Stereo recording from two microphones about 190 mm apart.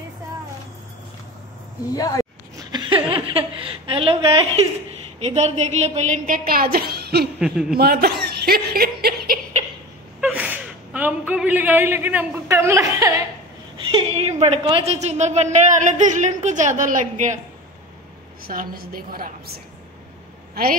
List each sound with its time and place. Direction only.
2.0 s speech: 20° left (ahead or behind)
2.7 s a sound: 25° right (ahead or behind)
3.3 s a woman's voice: 30° right (ahead or behind); by 7.2 s 55° right (ahead or behind)
7.3 s a man's voice: 5° right (ahead or behind)
7.7 s speech: 55° right (ahead or behind)
10.2 s speech: 10° right (ahead or behind)
13.9 s a woman's voice: 30° right (ahead or behind)
18.4 s a woman's voice: 50° right (ahead or behind)